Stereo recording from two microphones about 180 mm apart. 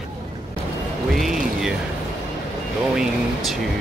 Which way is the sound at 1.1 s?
Centre (ahead or behind).